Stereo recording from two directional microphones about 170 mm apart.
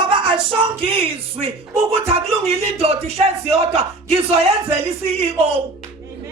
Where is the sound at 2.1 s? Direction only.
35° right (ahead or behind).